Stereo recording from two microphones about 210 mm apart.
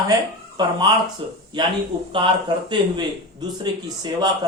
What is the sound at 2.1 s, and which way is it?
Speech, 25° right (ahead or behind).